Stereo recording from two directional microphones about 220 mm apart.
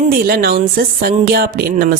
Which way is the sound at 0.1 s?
40° right (ahead or behind).